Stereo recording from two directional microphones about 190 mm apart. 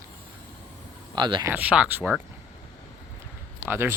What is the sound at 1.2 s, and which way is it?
Speech, 25° right (ahead or behind).